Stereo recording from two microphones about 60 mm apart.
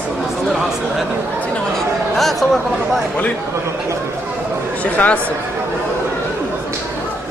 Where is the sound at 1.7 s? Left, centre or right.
Centre.